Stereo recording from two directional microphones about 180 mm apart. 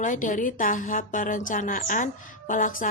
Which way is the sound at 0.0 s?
45° left (ahead or behind).